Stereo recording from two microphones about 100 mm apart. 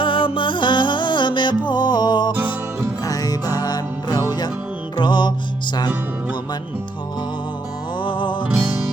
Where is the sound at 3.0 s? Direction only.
40° left (ahead or behind).